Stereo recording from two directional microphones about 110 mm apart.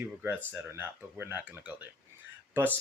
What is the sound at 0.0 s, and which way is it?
Speech, 15° right (ahead or behind).